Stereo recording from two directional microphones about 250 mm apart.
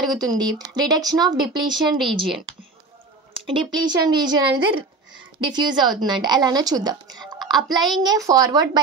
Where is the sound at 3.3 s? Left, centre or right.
Centre.